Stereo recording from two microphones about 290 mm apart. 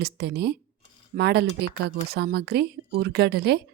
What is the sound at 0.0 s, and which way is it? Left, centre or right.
A woman's voice, right.